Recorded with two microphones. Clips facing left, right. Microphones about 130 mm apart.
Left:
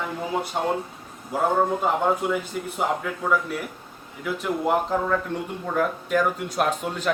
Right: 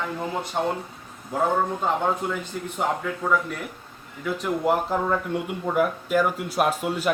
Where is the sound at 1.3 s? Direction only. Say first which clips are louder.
Left 1 dB; 10° left (ahead or behind).